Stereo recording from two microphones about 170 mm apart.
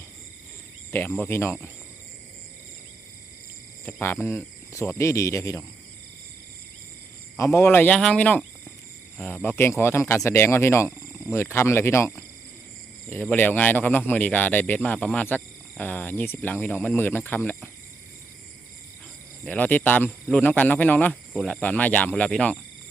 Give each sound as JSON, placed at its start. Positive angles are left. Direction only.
{"t": 0.9, "sound": "speech", "side_deg": 10}
{"t": 3.8, "sound": "speech", "side_deg": 15}
{"t": 7.3, "sound": "speech", "side_deg": 15}
{"t": 19.5, "sound": "speech", "side_deg": 10}